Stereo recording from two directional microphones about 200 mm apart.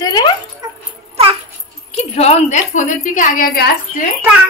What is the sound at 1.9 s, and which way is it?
Speech, 30° left (ahead or behind).